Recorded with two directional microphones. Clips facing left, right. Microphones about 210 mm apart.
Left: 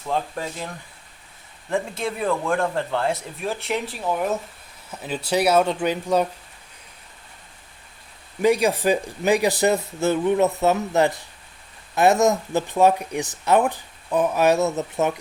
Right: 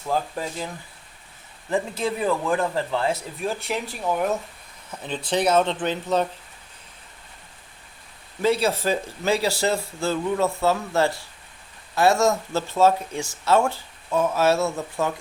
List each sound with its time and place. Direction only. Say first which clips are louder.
0.1 s speech: even; centre (ahead or behind)
1.7 s speech: right 1 dB; centre (ahead or behind)
8.4 s speech: left 3 dB; 15° left (ahead or behind)